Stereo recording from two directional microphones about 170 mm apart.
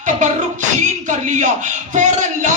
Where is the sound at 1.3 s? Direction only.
45° right (ahead or behind).